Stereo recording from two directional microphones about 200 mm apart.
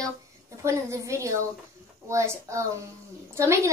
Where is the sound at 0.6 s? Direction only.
15° right (ahead or behind).